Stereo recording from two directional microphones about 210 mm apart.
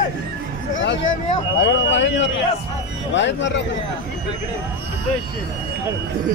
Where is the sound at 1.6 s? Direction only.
60° left (ahead or behind).